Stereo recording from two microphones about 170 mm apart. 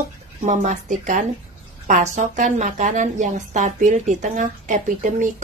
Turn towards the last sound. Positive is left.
turn(degrees=-45)  # may be behind; listen again after turning